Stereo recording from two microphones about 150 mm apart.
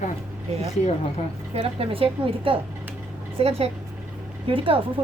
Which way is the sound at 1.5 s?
40° right (ahead or behind).